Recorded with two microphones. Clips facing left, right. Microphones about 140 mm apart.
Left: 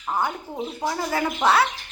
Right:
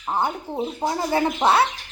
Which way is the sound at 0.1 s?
25° right (ahead or behind).